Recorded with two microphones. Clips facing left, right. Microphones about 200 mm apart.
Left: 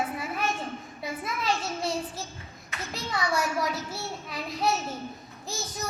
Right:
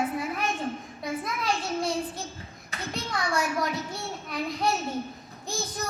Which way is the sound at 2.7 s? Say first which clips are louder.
Right 1 dB; 35° right (ahead or behind).